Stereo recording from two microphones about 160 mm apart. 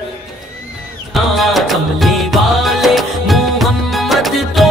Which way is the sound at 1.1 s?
Centre (ahead or behind).